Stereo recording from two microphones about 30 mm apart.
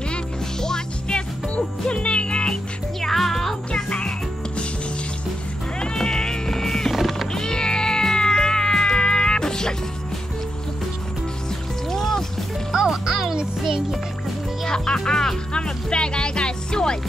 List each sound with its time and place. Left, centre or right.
0.6 s music: left
1.5 s music: left
3.0 s music: centre
5.9 s music: left
6.9 s music: centre
7.3 s cat: left
11.9 s music: centre
12.7 s music: centre
15.0 s music: centre
15.5 s music: left